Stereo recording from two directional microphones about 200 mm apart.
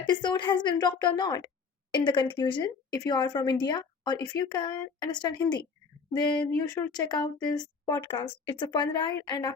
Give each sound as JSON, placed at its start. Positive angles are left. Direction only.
{"t": 0.1, "sound": "a woman's voice", "side_deg": 20}
{"t": 6.4, "sound": "a woman's voice", "side_deg": 10}